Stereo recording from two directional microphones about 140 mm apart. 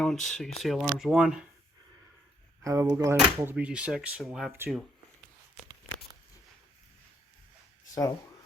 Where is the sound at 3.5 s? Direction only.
10° right (ahead or behind).